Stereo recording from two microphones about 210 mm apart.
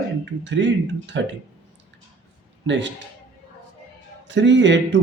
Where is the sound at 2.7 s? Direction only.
60° right (ahead or behind).